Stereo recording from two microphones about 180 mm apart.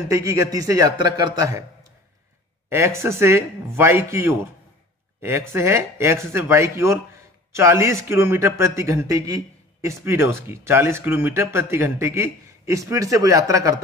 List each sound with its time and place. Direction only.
0.1 s a man's voice: 15° right (ahead or behind)
2.7 s a man's voice: 15° right (ahead or behind)